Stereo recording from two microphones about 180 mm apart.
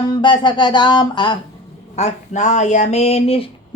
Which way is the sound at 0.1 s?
25° left (ahead or behind).